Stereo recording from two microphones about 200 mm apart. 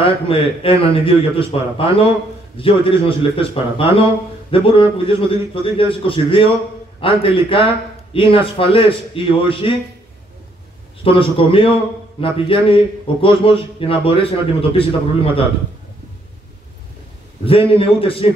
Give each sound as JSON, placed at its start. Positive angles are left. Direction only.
{"t": 0.0, "sound": "a man's voice", "side_deg": 25}
{"t": 11.1, "sound": "a man's voice", "side_deg": 25}
{"t": 17.5, "sound": "a man's voice", "side_deg": 30}